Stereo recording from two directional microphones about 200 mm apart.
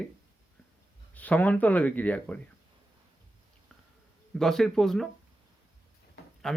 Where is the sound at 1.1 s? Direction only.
10° left (ahead or behind).